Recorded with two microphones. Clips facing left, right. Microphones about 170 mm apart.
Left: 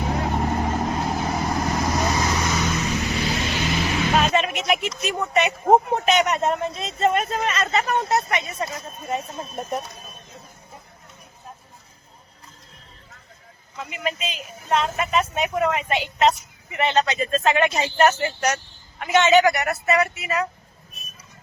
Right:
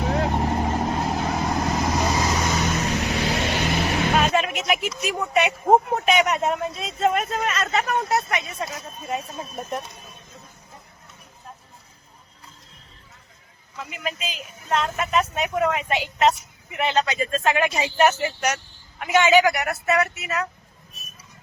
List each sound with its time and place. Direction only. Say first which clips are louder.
0.3 s vehicle: even; 5° right (ahead or behind)
2.4 s vehicle: even; 35° right (ahead or behind)
3.2 s vehicle: right 1 dB; 55° right (ahead or behind)
4.1 s music: left 2 dB; centre (ahead or behind)
6.1 s speech: even; 5° right (ahead or behind)
13.7 s speech: left 3 dB; centre (ahead or behind)